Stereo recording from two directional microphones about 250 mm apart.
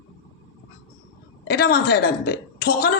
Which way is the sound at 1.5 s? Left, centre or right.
Left.